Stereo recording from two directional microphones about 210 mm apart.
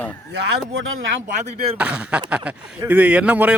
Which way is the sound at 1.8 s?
5° right (ahead or behind).